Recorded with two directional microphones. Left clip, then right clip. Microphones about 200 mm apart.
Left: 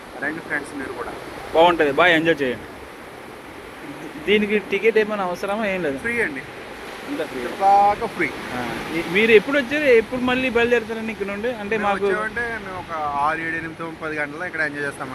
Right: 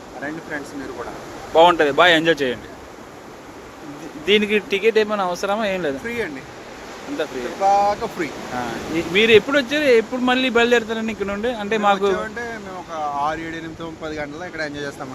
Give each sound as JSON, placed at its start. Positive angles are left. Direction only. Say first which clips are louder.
{"t": 0.5, "sound": "a man's voice", "louder": "left 2 dB", "side_deg": -10}
{"t": 4.3, "sound": "a man's voice", "louder": "right 2 dB", "side_deg": -15}
{"t": 7.2, "sound": "a man's voice", "louder": "right 1 dB", "side_deg": -20}
{"t": 9.5, "sound": "a man's voice", "louder": "right 1 dB", "side_deg": -5}